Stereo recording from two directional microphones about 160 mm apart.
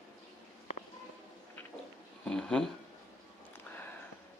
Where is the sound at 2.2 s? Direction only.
5° left (ahead or behind).